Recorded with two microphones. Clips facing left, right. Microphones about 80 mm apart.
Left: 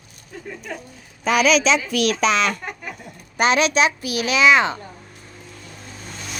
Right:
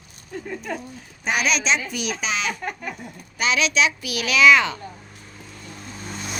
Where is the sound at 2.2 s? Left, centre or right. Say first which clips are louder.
Left 6 dB; left.